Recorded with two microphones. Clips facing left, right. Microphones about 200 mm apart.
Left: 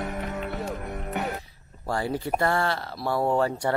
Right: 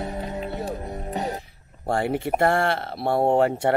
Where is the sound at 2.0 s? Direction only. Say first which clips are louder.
Right 3 dB; 60° right (ahead or behind).